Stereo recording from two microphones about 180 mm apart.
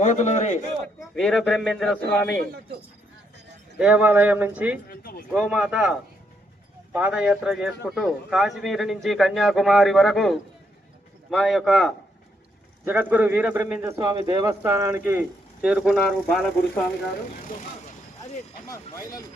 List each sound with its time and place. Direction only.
0.0 s a man's voice: 40° left (ahead or behind)
1.1 s a man's voice: centre (ahead or behind)
3.8 s a man's voice: 5° right (ahead or behind)
4.9 s a sound: 55° left (ahead or behind)
5.3 s a man's voice: 5° right (ahead or behind)
12.8 s a man's voice: 10° right (ahead or behind)
18.7 s speech: 20° left (ahead or behind)